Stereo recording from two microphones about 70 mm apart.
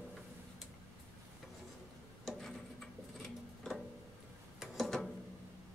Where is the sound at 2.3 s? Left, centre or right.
Centre.